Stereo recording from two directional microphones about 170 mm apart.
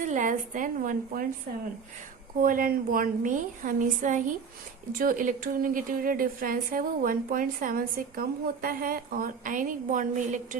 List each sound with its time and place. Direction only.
0.0 s a woman's voice: 45° right (ahead or behind)
2.4 s a woman's voice: 55° right (ahead or behind)